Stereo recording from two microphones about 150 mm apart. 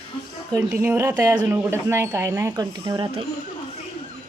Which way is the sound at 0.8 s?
15° right (ahead or behind).